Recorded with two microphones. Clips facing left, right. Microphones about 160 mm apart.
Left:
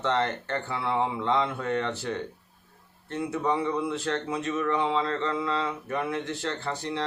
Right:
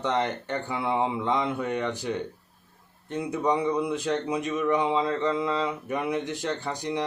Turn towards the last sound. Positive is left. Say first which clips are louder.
# right 1 dB
turn(degrees=-15)  # may be behind; listen again after turning